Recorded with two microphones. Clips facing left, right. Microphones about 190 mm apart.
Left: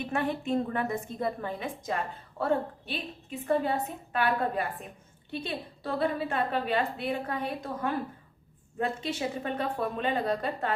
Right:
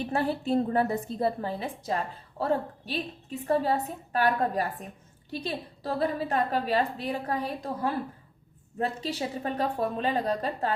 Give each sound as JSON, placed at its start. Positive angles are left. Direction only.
{"t": 0.1, "sound": "a woman's voice", "side_deg": -35}